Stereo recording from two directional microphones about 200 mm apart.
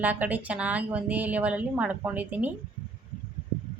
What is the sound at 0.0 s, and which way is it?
Speech, 10° right (ahead or behind).